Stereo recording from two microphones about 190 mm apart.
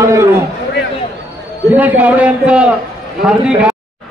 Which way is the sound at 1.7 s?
10° right (ahead or behind).